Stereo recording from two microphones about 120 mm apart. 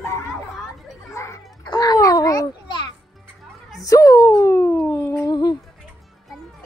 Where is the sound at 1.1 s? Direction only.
25° left (ahead or behind).